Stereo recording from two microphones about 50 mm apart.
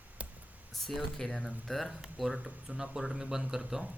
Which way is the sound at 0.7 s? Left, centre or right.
Centre.